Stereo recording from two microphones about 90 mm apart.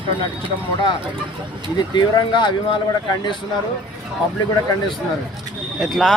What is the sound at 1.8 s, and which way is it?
Speech, 55° left (ahead or behind).